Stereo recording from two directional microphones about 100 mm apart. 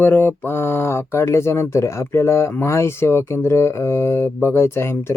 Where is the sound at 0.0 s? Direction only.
20° left (ahead or behind).